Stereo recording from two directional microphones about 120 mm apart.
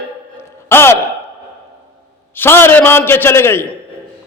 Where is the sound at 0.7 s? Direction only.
20° left (ahead or behind).